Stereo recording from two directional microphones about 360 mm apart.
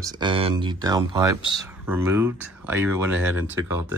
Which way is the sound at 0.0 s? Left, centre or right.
Centre.